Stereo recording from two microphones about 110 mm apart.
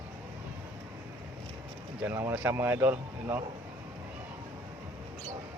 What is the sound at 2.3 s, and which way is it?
Speech, 15° right (ahead or behind).